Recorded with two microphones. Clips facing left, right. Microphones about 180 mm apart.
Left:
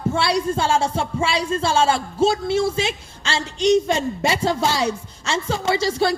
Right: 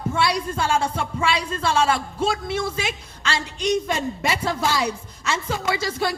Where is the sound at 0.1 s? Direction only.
30° left (ahead or behind).